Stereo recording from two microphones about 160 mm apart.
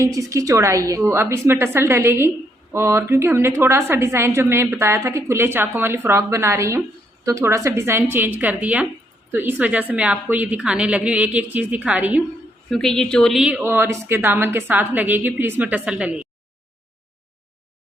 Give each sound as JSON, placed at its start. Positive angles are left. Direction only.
{"t": 0.0, "sound": "a woman's voice", "side_deg": -20}
{"t": 12.7, "sound": "a woman's voice", "side_deg": 0}
{"t": 13.6, "sound": "a woman's voice", "side_deg": -15}